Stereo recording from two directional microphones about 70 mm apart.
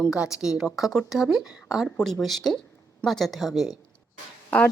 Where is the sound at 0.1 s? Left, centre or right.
Centre.